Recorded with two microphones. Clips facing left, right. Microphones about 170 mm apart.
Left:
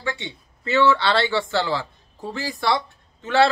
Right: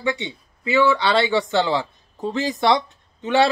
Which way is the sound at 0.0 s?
20° right (ahead or behind).